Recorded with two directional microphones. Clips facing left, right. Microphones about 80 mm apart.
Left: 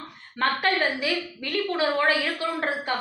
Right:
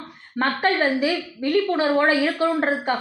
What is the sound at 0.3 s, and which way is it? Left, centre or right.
A woman's voice, right.